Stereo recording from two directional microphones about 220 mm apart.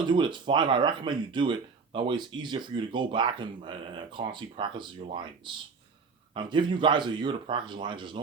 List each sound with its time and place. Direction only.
0.0 s speech: 20° right (ahead or behind)